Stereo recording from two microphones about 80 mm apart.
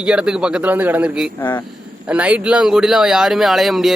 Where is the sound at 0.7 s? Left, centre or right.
Right.